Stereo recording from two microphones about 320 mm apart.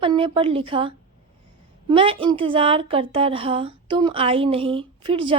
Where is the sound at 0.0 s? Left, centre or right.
Centre.